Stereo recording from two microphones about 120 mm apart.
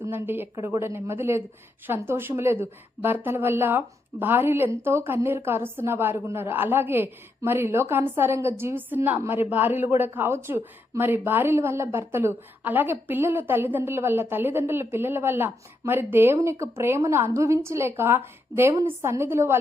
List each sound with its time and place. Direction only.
0.0 s a woman's voice: 20° right (ahead or behind)